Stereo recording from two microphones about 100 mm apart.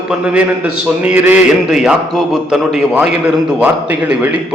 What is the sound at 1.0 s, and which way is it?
Speech, 20° right (ahead or behind).